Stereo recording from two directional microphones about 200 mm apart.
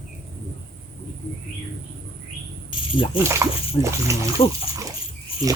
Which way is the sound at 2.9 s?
25° left (ahead or behind).